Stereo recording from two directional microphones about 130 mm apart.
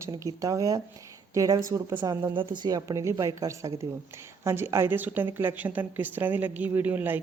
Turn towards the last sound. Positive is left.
turn(degrees=-15)  # may be behind; listen again after turning